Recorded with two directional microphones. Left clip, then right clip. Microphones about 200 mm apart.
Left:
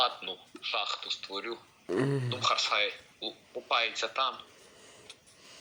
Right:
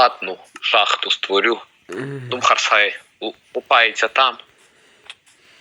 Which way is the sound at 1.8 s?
Centre (ahead or behind).